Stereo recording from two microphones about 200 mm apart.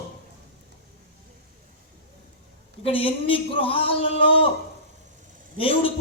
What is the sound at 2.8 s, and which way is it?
A man's voice, 25° left (ahead or behind).